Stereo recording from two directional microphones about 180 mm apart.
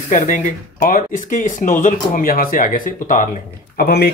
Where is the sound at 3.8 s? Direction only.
60° left (ahead or behind).